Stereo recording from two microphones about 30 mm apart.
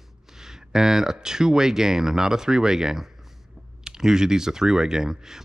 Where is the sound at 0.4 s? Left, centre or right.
Centre.